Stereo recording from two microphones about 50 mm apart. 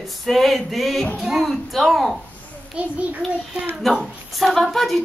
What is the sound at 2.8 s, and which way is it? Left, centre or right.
Speech, right.